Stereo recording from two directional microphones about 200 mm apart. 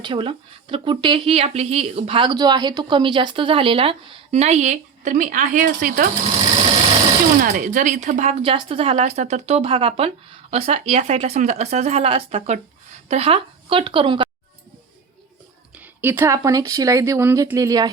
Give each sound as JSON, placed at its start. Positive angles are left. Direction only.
{"t": 0.0, "sound": "speech", "side_deg": -25}
{"t": 7.4, "sound": "a woman's voice", "side_deg": -40}
{"t": 15.7, "sound": "speech", "side_deg": -10}